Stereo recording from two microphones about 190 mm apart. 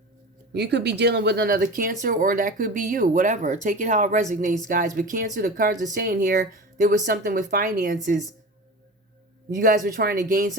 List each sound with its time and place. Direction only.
0.5 s speech: 60° right (ahead or behind)
9.6 s speech: 50° right (ahead or behind)